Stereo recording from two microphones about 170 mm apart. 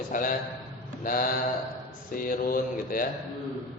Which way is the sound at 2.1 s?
55° left (ahead or behind).